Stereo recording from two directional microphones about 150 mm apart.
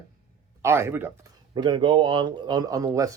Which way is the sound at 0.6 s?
15° right (ahead or behind).